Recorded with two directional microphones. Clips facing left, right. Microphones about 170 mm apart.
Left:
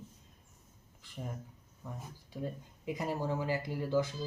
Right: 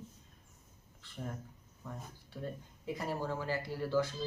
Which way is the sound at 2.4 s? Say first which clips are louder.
Left 2 dB; 15° left (ahead or behind).